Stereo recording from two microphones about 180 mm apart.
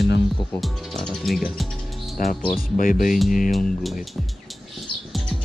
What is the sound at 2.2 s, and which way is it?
Speech, 50° left (ahead or behind).